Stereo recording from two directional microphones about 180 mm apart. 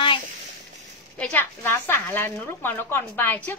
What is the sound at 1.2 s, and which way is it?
A woman's voice, 10° left (ahead or behind).